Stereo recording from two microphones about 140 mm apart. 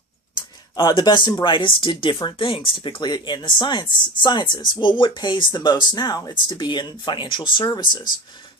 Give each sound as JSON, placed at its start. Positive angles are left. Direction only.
{"t": 0.8, "sound": "speech", "side_deg": 30}